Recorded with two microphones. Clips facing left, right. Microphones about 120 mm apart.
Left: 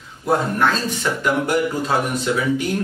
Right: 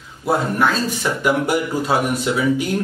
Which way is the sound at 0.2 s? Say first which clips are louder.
Even; 10° right (ahead or behind).